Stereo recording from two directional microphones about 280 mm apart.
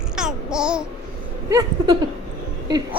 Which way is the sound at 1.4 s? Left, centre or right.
Centre.